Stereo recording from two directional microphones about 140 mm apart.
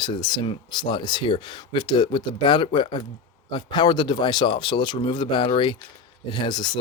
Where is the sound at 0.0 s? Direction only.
30° left (ahead or behind).